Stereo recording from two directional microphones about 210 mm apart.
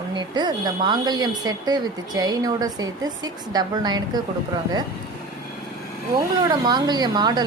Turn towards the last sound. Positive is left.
turn(degrees=-20)  # may be behind; listen again after turning